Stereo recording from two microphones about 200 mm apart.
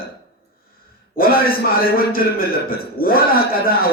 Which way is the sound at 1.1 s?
45° left (ahead or behind).